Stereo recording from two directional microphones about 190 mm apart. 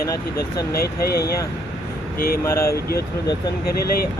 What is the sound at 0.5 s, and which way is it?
Speech, 20° left (ahead or behind).